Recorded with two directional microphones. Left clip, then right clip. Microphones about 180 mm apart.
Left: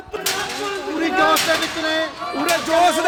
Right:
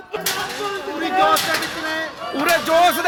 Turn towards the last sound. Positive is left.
turn(degrees=10)  # may be behind; listen again after turning